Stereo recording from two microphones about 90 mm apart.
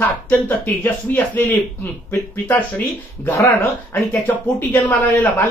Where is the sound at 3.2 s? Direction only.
20° left (ahead or behind).